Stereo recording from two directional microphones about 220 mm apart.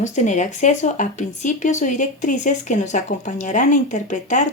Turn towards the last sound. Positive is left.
turn(degrees=35)  # may be behind; listen again after turning